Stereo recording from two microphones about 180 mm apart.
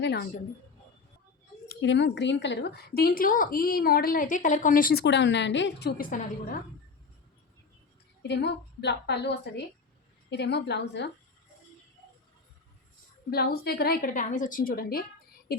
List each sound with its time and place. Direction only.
0.0 s a woman's voice: 65° left (ahead or behind)
1.6 s speech: 70° left (ahead or behind); by 5.0 s 50° left (ahead or behind)
5.0 s a woman's voice: 75° left (ahead or behind)
6.0 s a woman's voice: 50° left (ahead or behind)
8.2 s a woman's voice: 70° left (ahead or behind)
13.3 s speech: 60° left (ahead or behind)